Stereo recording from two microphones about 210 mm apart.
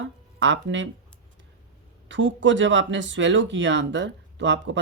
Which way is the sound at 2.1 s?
60° right (ahead or behind).